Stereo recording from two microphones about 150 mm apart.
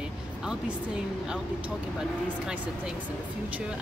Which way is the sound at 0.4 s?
5° right (ahead or behind).